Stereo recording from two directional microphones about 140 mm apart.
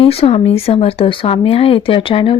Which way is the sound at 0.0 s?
45° left (ahead or behind).